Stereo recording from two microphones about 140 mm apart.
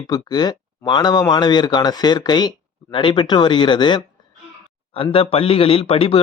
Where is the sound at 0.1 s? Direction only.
30° left (ahead or behind).